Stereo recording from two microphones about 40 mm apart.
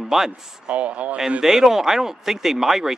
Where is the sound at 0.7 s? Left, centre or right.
Right.